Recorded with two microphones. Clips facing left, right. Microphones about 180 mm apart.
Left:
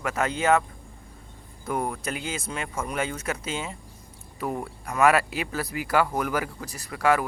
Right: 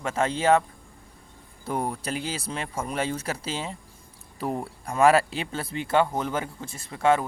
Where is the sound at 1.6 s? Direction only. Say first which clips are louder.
Even; 30° right (ahead or behind).